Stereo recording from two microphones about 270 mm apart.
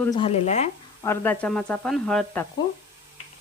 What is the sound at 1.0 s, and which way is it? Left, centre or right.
Speech, centre.